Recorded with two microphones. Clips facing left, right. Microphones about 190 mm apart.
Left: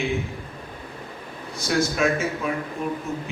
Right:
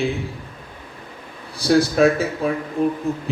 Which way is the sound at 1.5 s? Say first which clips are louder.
Right 7 dB; 35° right (ahead or behind).